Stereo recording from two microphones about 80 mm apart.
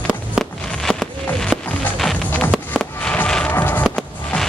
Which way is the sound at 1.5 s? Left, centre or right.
Centre.